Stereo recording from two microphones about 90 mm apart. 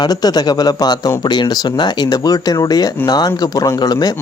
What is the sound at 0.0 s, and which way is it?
Speech, 45° left (ahead or behind).